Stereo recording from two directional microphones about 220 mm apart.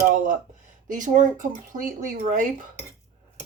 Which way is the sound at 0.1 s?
35° right (ahead or behind).